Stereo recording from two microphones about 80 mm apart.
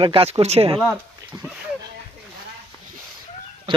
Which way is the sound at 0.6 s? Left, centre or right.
Right.